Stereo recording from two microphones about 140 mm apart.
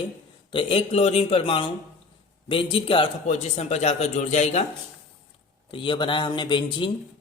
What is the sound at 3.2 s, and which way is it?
Speech, 50° left (ahead or behind).